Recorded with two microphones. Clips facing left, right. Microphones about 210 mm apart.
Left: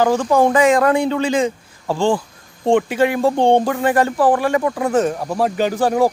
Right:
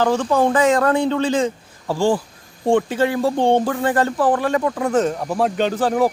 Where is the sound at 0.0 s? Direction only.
10° left (ahead or behind).